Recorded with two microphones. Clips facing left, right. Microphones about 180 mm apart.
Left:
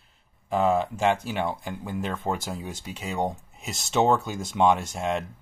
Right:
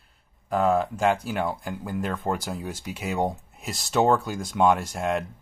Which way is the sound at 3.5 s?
Centre (ahead or behind).